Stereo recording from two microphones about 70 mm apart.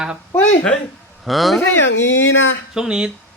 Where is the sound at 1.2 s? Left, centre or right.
Centre.